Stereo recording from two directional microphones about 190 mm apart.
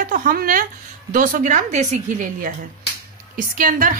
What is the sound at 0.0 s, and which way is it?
A woman's voice, 45° right (ahead or behind).